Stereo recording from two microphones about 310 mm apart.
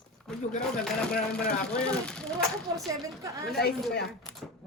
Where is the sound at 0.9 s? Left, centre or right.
Centre.